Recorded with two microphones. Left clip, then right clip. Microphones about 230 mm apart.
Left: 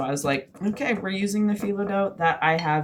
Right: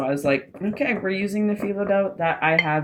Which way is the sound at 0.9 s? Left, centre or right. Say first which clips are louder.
Right 2 dB; left.